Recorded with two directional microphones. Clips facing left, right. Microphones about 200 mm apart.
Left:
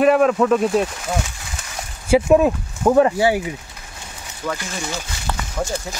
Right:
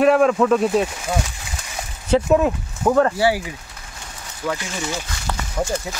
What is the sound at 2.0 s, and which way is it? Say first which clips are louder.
Speech: left 3 dB; 10° left (ahead or behind).